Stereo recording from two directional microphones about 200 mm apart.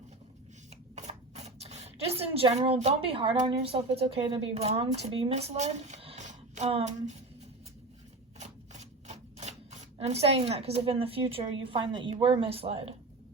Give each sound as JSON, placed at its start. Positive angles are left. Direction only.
{"t": 0.9, "sound": "speech", "side_deg": -35}
{"t": 8.4, "sound": "shuffling cards", "side_deg": -35}
{"t": 12.2, "sound": "speech", "side_deg": -25}